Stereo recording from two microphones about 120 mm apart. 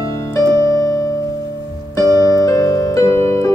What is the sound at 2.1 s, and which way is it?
Music, 25° left (ahead or behind).